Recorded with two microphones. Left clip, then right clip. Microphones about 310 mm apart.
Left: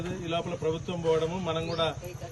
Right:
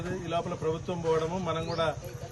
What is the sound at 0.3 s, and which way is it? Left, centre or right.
A man's voice, centre.